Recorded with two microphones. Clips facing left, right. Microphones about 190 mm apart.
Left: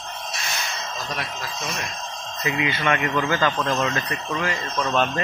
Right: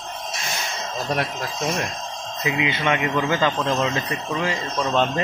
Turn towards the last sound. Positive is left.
turn(degrees=-15)  # may be behind; listen again after turning